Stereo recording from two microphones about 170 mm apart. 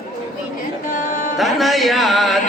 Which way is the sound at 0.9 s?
55° left (ahead or behind).